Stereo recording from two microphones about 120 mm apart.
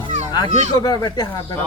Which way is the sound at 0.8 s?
35° left (ahead or behind).